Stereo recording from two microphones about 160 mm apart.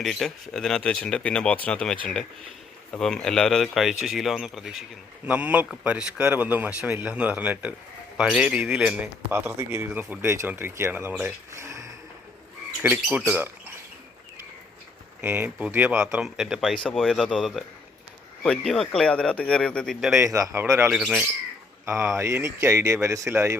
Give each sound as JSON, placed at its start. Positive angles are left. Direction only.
{"t": 0.0, "sound": "a man's voice", "side_deg": 0}
{"t": 12.8, "sound": "a man's voice", "side_deg": -10}
{"t": 15.2, "sound": "a man's voice", "side_deg": -10}
{"t": 20.1, "sound": "a man's voice", "side_deg": -20}
{"t": 22.1, "sound": "a man's voice", "side_deg": -15}